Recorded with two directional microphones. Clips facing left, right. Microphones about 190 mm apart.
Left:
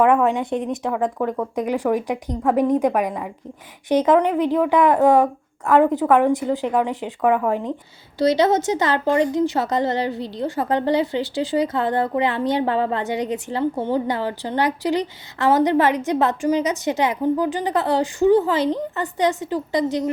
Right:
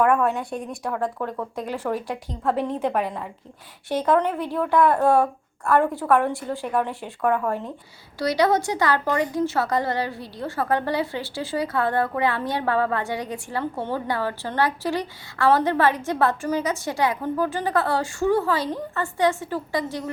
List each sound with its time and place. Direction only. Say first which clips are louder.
0.0 s speech: left 4 dB; 20° left (ahead or behind)